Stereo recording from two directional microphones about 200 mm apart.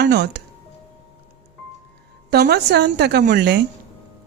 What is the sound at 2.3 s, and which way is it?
A woman's voice, 50° right (ahead or behind).